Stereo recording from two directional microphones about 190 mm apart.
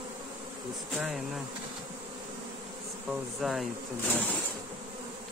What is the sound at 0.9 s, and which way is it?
Speech, centre (ahead or behind).